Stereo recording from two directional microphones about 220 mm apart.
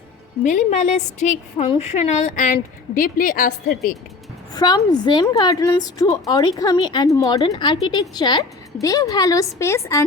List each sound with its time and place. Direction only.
0.4 s a woman's voice: 35° left (ahead or behind)
4.5 s a woman's voice: 20° left (ahead or behind)